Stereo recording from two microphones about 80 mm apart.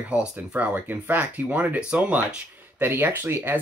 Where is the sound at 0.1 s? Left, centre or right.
Centre.